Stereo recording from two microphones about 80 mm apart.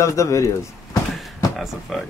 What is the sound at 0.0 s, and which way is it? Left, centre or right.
Speech, left.